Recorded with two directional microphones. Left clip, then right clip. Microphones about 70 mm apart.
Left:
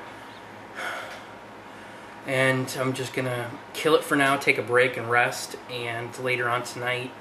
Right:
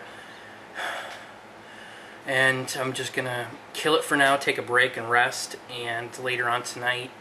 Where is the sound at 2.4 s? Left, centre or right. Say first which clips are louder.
Right 1 dB; right.